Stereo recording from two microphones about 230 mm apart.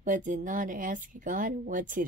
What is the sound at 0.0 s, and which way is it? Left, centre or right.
Speech, right.